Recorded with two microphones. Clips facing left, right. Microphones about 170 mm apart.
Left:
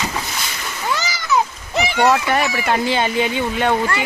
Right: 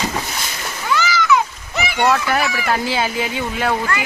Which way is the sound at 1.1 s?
35° left (ahead or behind).